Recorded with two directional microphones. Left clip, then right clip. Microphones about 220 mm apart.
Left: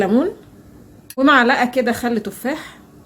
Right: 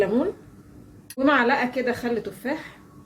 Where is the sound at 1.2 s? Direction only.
50° left (ahead or behind).